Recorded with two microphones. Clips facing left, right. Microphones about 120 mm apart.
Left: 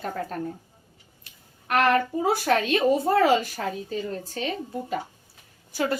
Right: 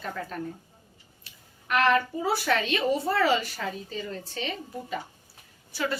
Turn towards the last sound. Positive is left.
turn(degrees=45)  # may be behind; listen again after turning